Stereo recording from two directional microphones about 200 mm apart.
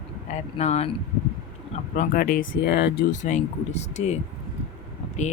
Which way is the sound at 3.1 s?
35° left (ahead or behind).